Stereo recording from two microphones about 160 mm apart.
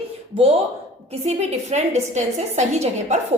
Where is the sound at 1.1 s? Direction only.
45° right (ahead or behind).